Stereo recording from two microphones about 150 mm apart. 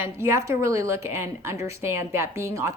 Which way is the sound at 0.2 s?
20° right (ahead or behind).